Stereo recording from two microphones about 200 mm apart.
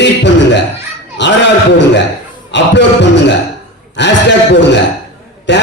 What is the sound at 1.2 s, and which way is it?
Speech, 60° left (ahead or behind).